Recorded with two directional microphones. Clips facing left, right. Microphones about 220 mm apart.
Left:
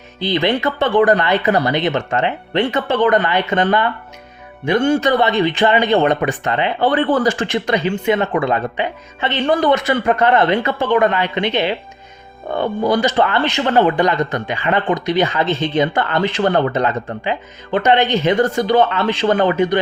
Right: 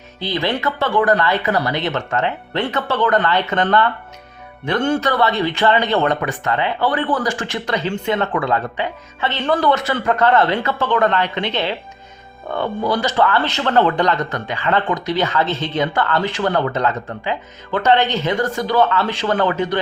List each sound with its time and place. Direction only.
0.2 s speech: 20° left (ahead or behind)
7.9 s speech: 10° left (ahead or behind)